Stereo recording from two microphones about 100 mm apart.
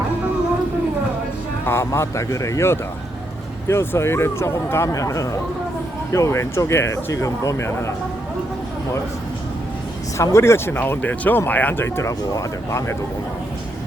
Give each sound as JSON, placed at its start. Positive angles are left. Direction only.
{"t": 1.6, "sound": "speech", "side_deg": 25}
{"t": 10.2, "sound": "speech", "side_deg": 25}